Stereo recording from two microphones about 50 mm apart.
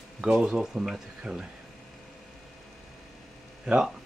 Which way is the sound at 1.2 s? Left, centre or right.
Right.